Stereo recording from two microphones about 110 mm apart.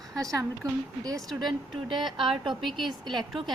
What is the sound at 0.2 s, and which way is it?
A woman's voice, 30° right (ahead or behind).